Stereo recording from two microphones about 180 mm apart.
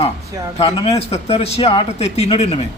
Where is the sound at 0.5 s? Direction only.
35° left (ahead or behind).